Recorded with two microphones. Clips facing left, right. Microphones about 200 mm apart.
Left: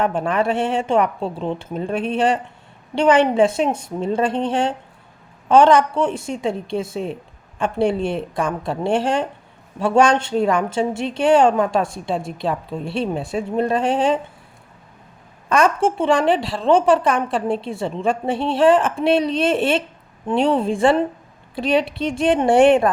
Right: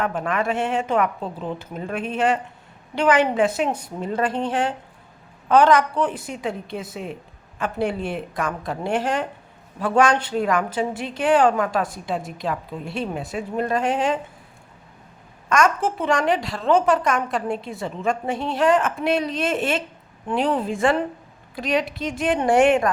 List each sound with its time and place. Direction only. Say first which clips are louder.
0.0 s a woman's voice: left 4 dB; 30° left (ahead or behind)
15.4 s a woman's voice: left 3 dB; 30° left (ahead or behind)